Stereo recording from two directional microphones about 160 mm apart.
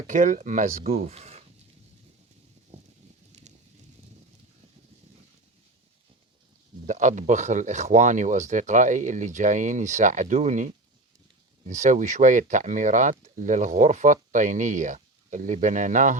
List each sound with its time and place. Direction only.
0.1 s speech: 50° right (ahead or behind)
0.9 s speech: 40° right (ahead or behind)
3.3 s fire: 45° right (ahead or behind)
6.8 s speech: 50° right (ahead or behind)